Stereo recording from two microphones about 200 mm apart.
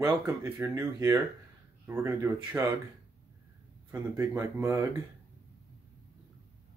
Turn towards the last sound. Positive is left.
turn(degrees=-15)  # may be behind; listen again after turning